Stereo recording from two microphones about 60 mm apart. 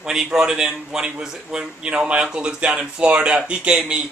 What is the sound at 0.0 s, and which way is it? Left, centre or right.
Speech, centre.